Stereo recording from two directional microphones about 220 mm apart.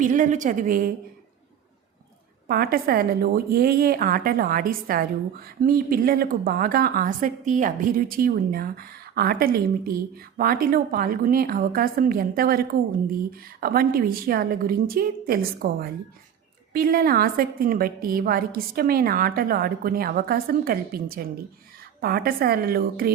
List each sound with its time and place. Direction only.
0.0 s a woman's voice: 35° right (ahead or behind)
2.5 s a woman's voice: 45° right (ahead or behind)